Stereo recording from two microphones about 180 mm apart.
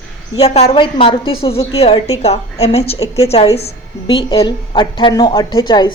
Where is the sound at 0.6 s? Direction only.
30° left (ahead or behind).